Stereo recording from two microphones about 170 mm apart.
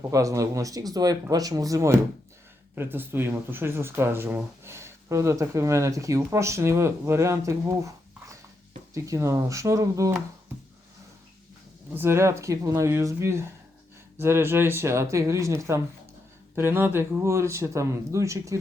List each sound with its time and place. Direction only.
0.1 s speech: 20° right (ahead or behind)
11.9 s speech: 15° right (ahead or behind)